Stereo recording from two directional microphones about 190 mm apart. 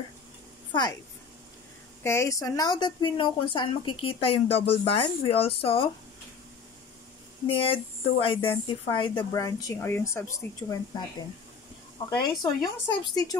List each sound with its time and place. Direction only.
0.7 s a woman's voice: 20° left (ahead or behind)
2.0 s a woman's voice: 15° left (ahead or behind); by 5.9 s 30° left (ahead or behind)
7.4 s a woman's voice: 25° left (ahead or behind)
12.1 s a woman's voice: 20° left (ahead or behind)